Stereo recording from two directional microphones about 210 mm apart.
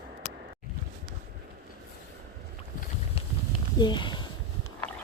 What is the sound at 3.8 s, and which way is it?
Speech, 20° left (ahead or behind).